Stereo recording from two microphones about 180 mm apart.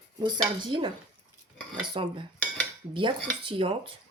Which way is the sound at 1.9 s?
25° right (ahead or behind).